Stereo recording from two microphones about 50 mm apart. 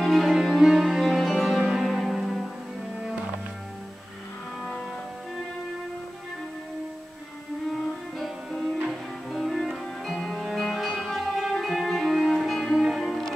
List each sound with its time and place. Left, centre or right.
0.0 s music: centre
1.6 s music: centre
1.9 s music: centre
8.2 s music: centre